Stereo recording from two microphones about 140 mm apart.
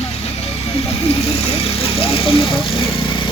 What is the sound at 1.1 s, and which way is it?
Vehicle, 45° left (ahead or behind).